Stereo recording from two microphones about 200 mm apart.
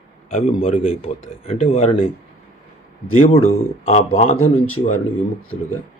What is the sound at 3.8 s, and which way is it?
Speech, 35° left (ahead or behind).